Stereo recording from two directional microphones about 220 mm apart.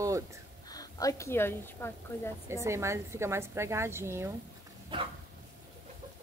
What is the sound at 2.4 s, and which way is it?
A woman's voice, 15° right (ahead or behind).